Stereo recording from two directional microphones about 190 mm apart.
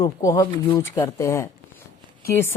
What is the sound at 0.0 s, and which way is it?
Speech, 15° left (ahead or behind).